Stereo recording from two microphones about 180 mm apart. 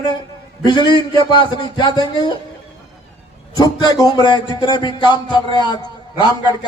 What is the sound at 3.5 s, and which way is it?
A man's voice, 20° left (ahead or behind).